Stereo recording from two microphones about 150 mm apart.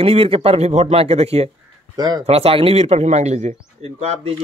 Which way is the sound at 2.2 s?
40° right (ahead or behind).